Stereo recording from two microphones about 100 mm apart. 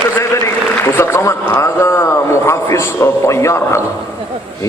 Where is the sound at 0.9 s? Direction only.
30° left (ahead or behind).